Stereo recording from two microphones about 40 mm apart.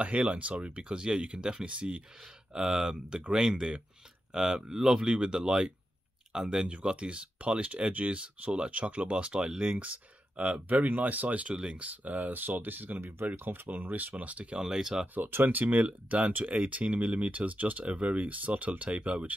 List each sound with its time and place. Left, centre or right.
0.0 s speech: right
2.5 s speech: centre
10.7 s speech: right
14.6 s speech: centre
15.1 s speech: right